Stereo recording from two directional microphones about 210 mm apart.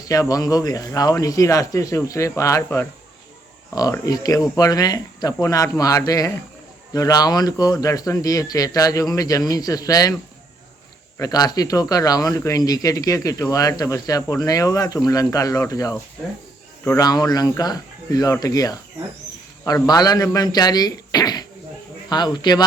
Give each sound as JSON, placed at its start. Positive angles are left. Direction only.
{"t": 0.0, "sound": "speech", "side_deg": 15}
{"t": 11.2, "sound": "speech", "side_deg": 20}